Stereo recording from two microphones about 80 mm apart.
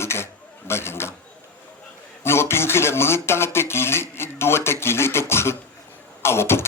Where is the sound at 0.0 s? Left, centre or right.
Left.